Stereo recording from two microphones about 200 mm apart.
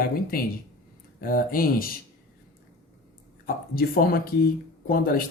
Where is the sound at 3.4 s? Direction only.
45° left (ahead or behind).